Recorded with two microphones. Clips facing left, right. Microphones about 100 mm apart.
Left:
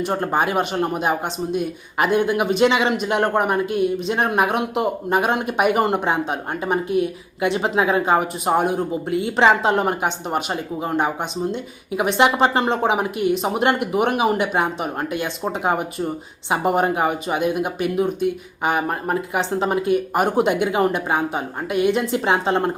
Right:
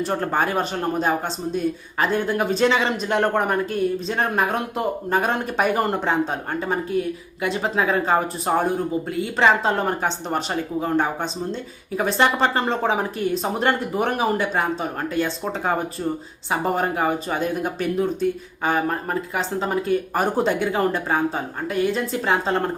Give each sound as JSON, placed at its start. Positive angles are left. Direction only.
{"t": 0.0, "sound": "speech", "side_deg": 15}